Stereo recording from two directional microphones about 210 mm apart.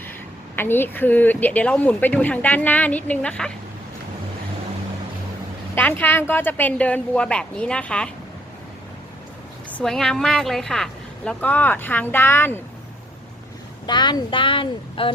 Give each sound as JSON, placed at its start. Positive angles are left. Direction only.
{"t": 0.5, "sound": "a woman's voice", "side_deg": 10}
{"t": 5.7, "sound": "a woman's voice", "side_deg": 10}
{"t": 9.6, "sound": "a woman's voice", "side_deg": 5}
{"t": 13.8, "sound": "speech", "side_deg": 20}